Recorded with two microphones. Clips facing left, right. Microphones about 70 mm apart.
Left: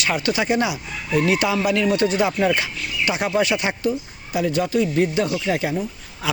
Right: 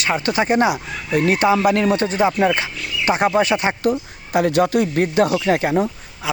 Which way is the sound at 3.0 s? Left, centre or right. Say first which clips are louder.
Right 4 dB; right.